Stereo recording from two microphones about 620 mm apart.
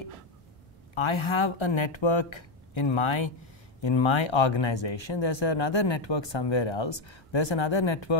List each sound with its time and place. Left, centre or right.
0.9 s speech: left